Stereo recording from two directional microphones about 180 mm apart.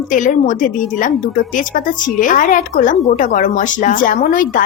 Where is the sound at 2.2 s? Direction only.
45° left (ahead or behind).